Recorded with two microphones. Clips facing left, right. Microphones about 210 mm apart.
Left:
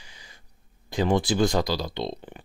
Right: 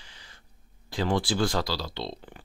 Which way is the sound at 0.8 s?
20° left (ahead or behind).